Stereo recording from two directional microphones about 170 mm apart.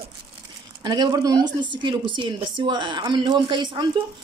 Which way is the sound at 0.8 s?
25° right (ahead or behind).